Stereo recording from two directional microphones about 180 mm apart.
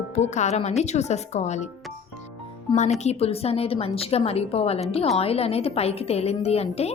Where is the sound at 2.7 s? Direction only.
25° left (ahead or behind).